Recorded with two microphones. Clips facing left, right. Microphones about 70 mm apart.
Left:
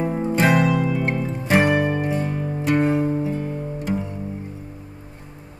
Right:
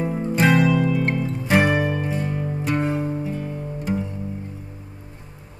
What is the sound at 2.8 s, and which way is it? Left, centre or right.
Music, centre.